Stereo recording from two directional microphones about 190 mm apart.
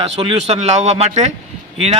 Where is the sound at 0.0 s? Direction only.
30° right (ahead or behind).